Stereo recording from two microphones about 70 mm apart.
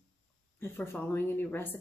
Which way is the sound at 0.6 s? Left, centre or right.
Left.